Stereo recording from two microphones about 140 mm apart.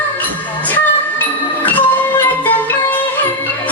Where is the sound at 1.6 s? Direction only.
15° left (ahead or behind).